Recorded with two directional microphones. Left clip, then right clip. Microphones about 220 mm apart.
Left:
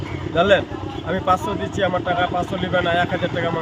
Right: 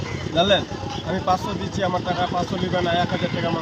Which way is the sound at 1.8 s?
5° left (ahead or behind).